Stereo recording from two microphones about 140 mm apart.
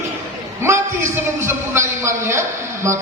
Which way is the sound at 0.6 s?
20° right (ahead or behind).